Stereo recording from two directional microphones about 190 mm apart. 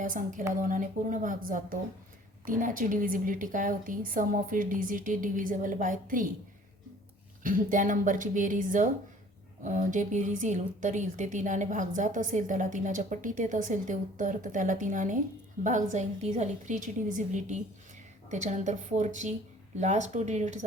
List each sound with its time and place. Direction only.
0.0 s a woman's voice: 45° right (ahead or behind)
7.4 s a woman's voice: 45° right (ahead or behind)